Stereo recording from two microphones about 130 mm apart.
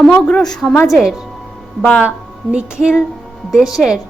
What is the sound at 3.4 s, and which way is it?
Speech, 5° right (ahead or behind).